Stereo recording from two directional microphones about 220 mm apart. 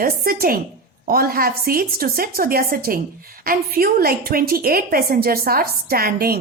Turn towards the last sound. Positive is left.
turn(degrees=-45)  # may be behind; listen again after turning